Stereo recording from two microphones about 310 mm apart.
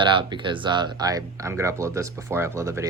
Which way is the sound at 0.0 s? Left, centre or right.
Centre.